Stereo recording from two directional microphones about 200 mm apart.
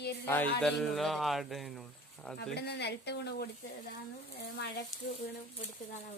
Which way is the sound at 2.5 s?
55° left (ahead or behind).